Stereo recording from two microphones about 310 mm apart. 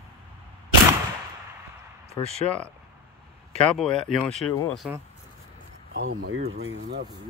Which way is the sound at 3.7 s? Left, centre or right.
Centre.